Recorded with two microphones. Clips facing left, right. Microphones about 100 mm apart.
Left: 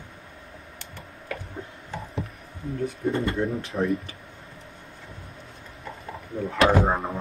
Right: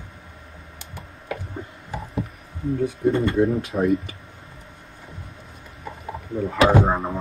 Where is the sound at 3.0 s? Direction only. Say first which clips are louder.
Right 7 dB; 15° right (ahead or behind).